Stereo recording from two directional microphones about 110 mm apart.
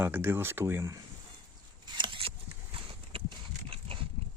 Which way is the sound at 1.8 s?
45° right (ahead or behind).